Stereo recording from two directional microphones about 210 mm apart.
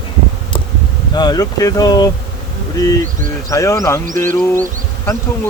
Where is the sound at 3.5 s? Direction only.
15° left (ahead or behind).